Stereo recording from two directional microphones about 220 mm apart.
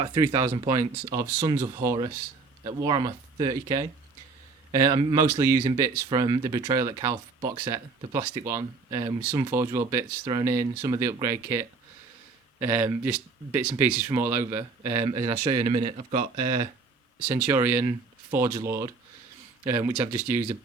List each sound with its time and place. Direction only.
0.0 s speech: 25° right (ahead or behind)
15.0 s speech: 20° right (ahead or behind)
17.2 s speech: 10° right (ahead or behind)